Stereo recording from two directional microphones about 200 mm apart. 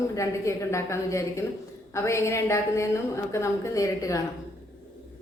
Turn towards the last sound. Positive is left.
turn(degrees=15)  # may be behind; listen again after turning